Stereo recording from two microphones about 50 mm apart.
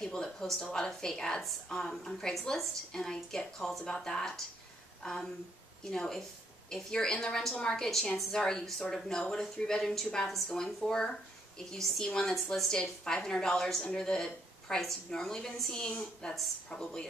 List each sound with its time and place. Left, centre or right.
0.0 s a woman's voice: centre